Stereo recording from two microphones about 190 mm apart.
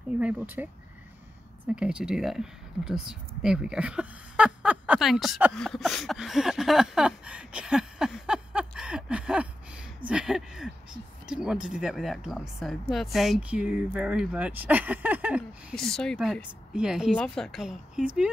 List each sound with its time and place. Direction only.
0.2 s speech: 10° right (ahead or behind)
1.7 s speech: 5° right (ahead or behind)
15.7 s speech: centre (ahead or behind)